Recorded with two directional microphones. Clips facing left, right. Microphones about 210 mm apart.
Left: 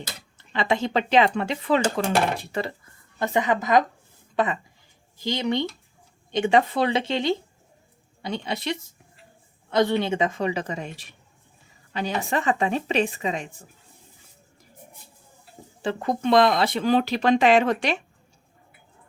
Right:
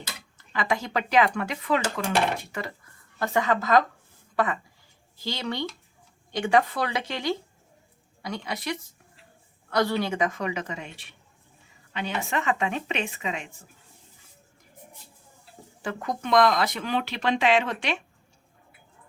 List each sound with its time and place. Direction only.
0.3 s speech: 25° left (ahead or behind)
15.8 s speech: 30° left (ahead or behind)